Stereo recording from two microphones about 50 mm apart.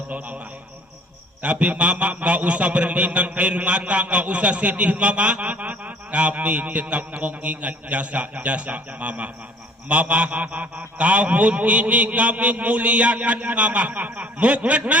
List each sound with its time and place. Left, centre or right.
1.4 s a man's voice: right